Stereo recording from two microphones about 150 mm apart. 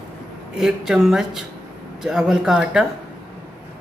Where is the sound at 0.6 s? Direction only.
5° right (ahead or behind).